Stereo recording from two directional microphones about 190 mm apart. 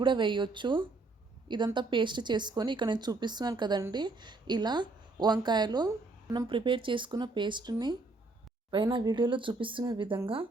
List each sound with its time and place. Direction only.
0.0 s speech: 25° right (ahead or behind)